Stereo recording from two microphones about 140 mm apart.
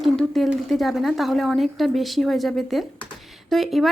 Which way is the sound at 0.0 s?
Centre (ahead or behind).